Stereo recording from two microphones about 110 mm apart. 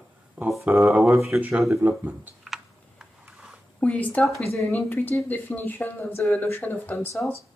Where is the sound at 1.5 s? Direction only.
5° right (ahead or behind).